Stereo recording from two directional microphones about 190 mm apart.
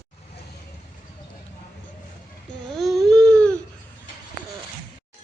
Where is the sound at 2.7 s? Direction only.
Centre (ahead or behind).